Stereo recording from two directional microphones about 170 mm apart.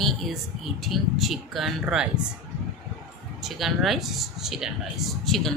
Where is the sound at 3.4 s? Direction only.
Centre (ahead or behind).